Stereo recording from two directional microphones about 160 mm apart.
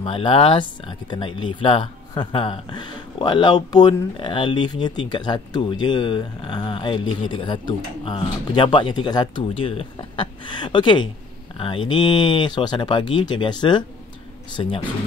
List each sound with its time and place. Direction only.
0.0 s speech: 35° left (ahead or behind)